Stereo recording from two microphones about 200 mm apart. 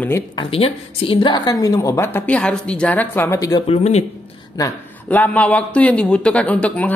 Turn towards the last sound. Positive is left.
turn(degrees=5)  # may be behind; listen again after turning